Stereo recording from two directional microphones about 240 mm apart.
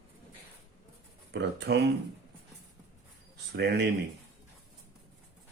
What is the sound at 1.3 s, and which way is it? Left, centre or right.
Speech, right.